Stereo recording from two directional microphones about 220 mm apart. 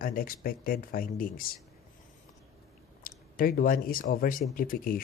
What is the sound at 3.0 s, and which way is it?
Speech, 40° left (ahead or behind).